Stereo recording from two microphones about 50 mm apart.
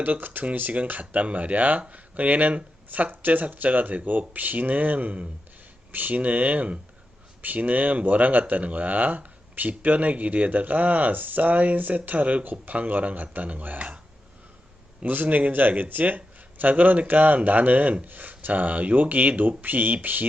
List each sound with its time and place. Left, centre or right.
0.0 s speech: right
15.0 s speech: right